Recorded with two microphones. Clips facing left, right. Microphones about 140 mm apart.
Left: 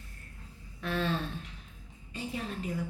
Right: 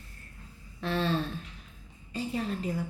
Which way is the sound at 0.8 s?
30° right (ahead or behind).